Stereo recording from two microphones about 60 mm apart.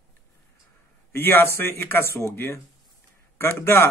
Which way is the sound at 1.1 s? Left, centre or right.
Left.